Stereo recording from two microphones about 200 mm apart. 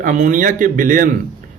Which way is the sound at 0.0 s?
40° right (ahead or behind).